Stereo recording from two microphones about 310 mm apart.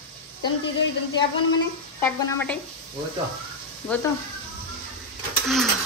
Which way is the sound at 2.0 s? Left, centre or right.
Centre.